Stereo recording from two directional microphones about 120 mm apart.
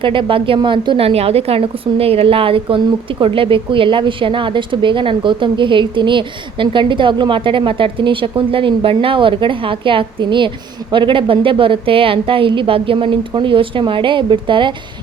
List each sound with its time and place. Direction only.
0.0 s a woman's voice: 45° right (ahead or behind)